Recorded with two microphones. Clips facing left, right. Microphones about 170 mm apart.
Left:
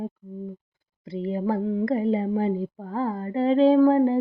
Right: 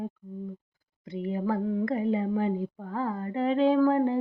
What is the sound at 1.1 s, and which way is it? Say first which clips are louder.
Speech: left 3 dB; 30° left (ahead or behind).